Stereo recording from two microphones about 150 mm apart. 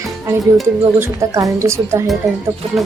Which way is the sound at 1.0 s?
20° right (ahead or behind).